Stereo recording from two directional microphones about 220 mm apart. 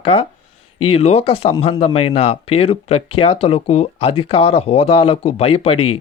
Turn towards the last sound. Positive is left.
turn(degrees=25)  # may be behind; listen again after turning